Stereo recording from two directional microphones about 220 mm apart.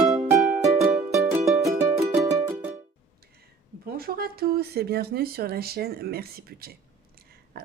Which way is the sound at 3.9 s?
45° right (ahead or behind).